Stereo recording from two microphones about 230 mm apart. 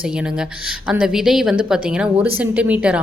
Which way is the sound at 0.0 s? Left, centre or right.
Centre.